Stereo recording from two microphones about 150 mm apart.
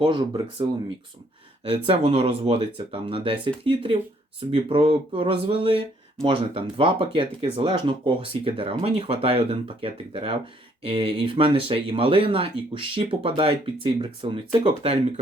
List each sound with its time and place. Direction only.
0.0 s speech: 30° right (ahead or behind)
1.7 s speech: 40° right (ahead or behind)